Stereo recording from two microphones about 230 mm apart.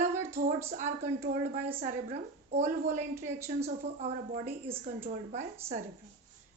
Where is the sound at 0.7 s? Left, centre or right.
Right.